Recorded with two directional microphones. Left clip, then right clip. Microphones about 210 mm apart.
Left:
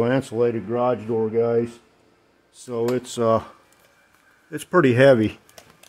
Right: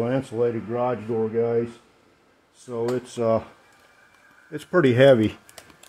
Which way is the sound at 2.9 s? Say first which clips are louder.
Left 2 dB; 30° left (ahead or behind).